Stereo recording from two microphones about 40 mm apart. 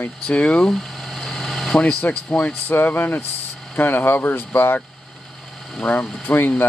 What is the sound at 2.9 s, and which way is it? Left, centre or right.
Speech, left.